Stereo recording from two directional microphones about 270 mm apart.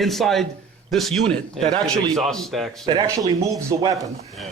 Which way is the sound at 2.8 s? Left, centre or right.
Centre.